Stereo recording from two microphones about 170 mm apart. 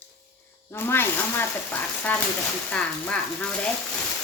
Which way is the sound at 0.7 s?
15° left (ahead or behind).